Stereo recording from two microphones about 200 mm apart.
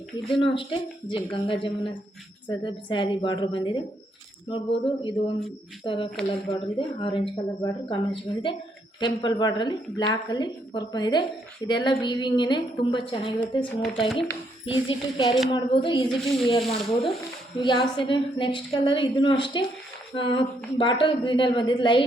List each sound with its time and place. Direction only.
0.3 s a woman's voice: 25° left (ahead or behind)
13.7 s speech: centre (ahead or behind)
14.7 s a woman's voice: 25° left (ahead or behind)
16.0 s speech: centre (ahead or behind)
16.5 s a woman's voice: 25° left (ahead or behind)